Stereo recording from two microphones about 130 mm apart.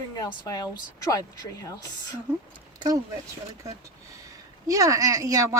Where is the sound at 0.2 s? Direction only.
30° left (ahead or behind).